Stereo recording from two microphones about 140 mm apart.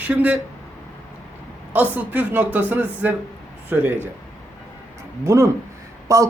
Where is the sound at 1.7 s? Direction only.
10° right (ahead or behind).